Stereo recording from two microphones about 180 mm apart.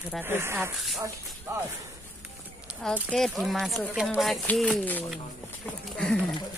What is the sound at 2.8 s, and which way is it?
Speech, 5° left (ahead or behind).